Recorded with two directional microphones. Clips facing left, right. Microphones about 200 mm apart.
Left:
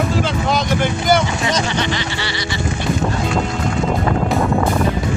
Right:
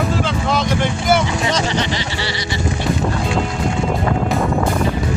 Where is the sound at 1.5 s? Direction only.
30° right (ahead or behind).